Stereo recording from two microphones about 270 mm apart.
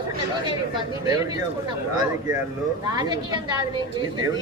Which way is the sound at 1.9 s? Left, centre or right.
Centre.